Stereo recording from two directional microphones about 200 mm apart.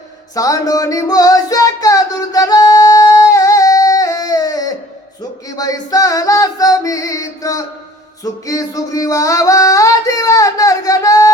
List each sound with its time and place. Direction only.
0.3 s music: 15° left (ahead or behind)